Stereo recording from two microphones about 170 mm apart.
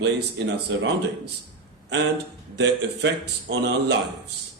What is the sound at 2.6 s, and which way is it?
Speech, 90° right.